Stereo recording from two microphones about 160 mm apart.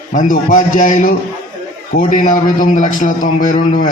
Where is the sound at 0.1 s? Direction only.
55° left (ahead or behind).